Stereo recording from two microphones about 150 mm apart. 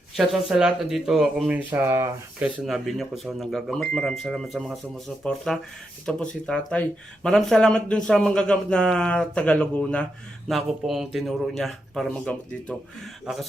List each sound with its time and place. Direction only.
0.2 s speech: centre (ahead or behind); by 2.0 s 20° right (ahead or behind)
2.4 s speech: centre (ahead or behind)